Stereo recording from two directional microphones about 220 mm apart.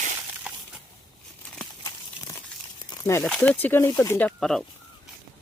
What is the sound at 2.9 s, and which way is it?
Crumpling, 10° left (ahead or behind).